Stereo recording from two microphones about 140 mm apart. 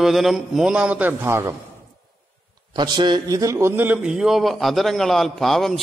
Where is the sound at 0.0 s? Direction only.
Centre (ahead or behind); by 1.5 s 20° right (ahead or behind).